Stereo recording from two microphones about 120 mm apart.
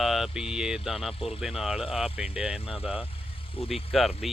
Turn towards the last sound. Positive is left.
turn(degrees=0)  # may be behind; listen again after turning